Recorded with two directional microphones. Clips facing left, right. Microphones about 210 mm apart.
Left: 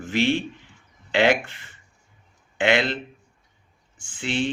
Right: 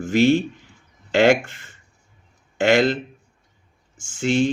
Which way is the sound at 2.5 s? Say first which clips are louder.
Right 5 dB; 40° right (ahead or behind).